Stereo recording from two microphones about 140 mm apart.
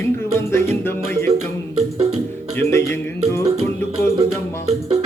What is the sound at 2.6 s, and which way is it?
Music, 20° left (ahead or behind).